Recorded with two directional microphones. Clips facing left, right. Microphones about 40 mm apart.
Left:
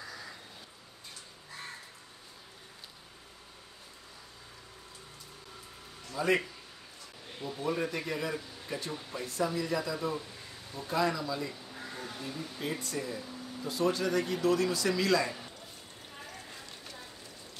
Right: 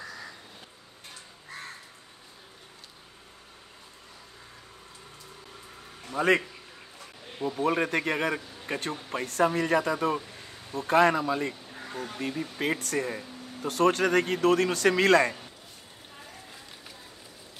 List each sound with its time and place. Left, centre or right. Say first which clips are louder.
6.1 s speech: right 5 dB; right
7.3 s a man's voice: right 9 dB; right
7.6 s speech: right 7 dB; right
10.2 s a sound: right 2 dB; right
10.8 s speech: right 9 dB; right
11.6 s a sound: right 2 dB; right
11.9 s speech: right 7 dB; right
12.2 s speech: right 9 dB; right